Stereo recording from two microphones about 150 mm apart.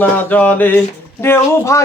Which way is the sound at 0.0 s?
10° left (ahead or behind).